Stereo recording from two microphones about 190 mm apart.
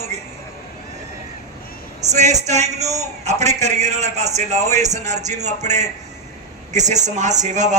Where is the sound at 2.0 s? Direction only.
35° right (ahead or behind).